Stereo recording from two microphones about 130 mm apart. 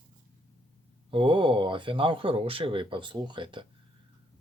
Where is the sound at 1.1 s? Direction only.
40° right (ahead or behind).